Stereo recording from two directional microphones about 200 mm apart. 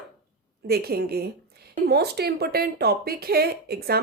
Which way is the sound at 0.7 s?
50° right (ahead or behind).